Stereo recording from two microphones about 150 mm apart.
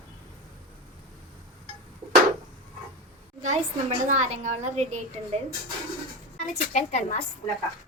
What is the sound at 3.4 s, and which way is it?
A woman's voice, 50° right (ahead or behind).